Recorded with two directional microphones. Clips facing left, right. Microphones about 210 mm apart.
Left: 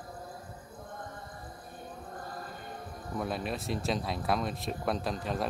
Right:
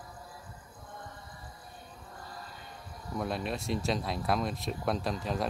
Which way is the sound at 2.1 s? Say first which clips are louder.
Left 3 dB; 50° left (ahead or behind).